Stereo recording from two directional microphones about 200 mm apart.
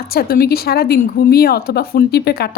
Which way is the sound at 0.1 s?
50° left (ahead or behind).